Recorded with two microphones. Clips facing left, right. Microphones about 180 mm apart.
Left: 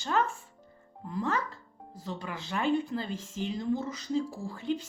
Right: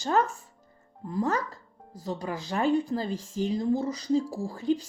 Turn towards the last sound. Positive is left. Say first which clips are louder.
# right 5 dB
turn(degrees=-40)  # may be behind; listen again after turning